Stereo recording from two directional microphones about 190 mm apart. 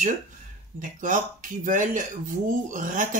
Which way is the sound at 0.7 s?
45° right (ahead or behind).